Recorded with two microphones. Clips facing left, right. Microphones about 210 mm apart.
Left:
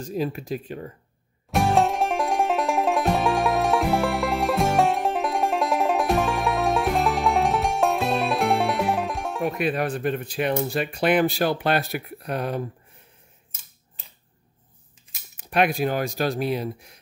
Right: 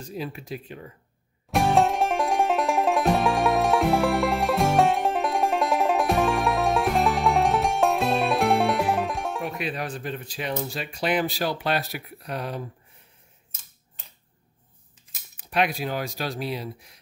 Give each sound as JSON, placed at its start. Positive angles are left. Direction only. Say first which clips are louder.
{"t": 0.0, "sound": "speech", "louder": "left 6 dB", "side_deg": 40}
{"t": 1.5, "sound": "music", "louder": "even", "side_deg": 0}
{"t": 9.6, "sound": "speech", "louder": "left 6 dB", "side_deg": 55}
{"t": 15.3, "sound": "speech", "louder": "left 3 dB", "side_deg": 50}